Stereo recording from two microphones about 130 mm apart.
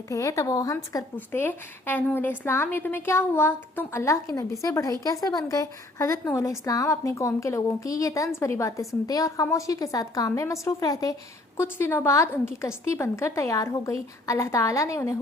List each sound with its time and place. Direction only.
0.1 s a woman's voice: 25° left (ahead or behind)
1.1 s a woman's voice: 15° left (ahead or behind)